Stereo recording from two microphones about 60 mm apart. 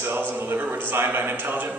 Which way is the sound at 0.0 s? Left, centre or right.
Right.